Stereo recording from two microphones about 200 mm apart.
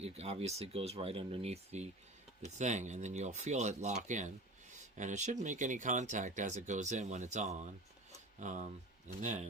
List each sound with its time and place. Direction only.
0.0 s speech: 30° right (ahead or behind)